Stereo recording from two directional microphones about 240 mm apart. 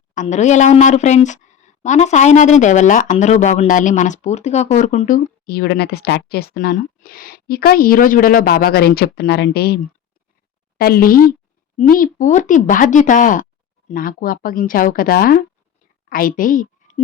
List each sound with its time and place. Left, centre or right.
0.1 s a woman's voice: left